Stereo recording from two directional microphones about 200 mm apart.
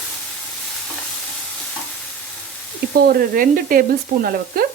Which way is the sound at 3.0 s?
45° right (ahead or behind).